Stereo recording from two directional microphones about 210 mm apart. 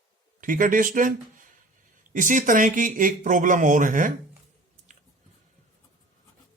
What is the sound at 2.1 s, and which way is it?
A man's voice, 35° right (ahead or behind).